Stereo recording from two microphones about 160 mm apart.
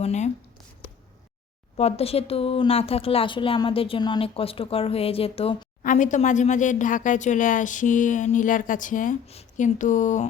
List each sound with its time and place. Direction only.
0.0 s speech: 45° left (ahead or behind)
1.7 s speech: 40° left (ahead or behind)
5.8 s speech: 55° left (ahead or behind)
9.2 s speech: 40° left (ahead or behind)